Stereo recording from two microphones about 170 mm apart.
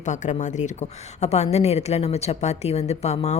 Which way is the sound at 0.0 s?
45° left (ahead or behind).